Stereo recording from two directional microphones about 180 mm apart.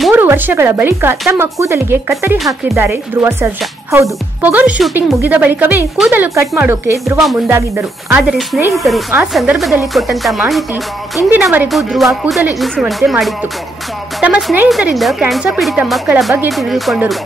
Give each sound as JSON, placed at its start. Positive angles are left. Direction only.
{"t": 0.1, "sound": "a woman's voice", "side_deg": -10}
{"t": 8.7, "sound": "speech", "side_deg": 0}
{"t": 14.2, "sound": "speech", "side_deg": -10}